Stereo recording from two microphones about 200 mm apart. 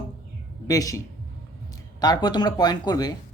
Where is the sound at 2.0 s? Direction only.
20° left (ahead or behind).